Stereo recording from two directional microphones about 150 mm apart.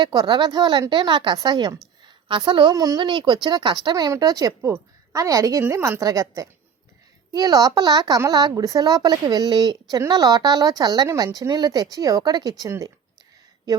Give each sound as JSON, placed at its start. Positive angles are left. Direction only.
{"t": 0.0, "sound": "a woman's voice", "side_deg": -30}